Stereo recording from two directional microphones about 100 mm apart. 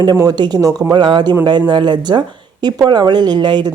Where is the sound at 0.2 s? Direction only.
45° right (ahead or behind).